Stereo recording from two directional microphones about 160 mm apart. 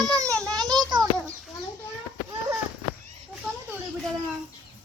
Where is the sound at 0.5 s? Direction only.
25° right (ahead or behind).